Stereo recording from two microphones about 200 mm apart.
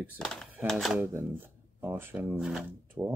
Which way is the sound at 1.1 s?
10° right (ahead or behind).